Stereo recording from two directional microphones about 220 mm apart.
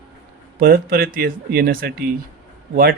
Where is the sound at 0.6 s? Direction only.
45° right (ahead or behind).